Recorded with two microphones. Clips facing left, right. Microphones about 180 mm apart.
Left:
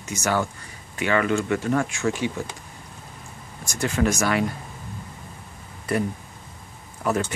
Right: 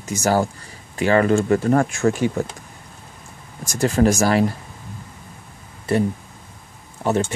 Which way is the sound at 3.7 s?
35° right (ahead or behind).